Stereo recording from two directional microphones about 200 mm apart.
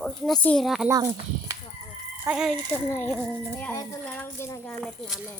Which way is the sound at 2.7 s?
10° left (ahead or behind).